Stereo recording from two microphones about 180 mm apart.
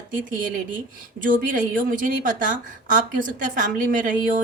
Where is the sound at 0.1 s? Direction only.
50° right (ahead or behind).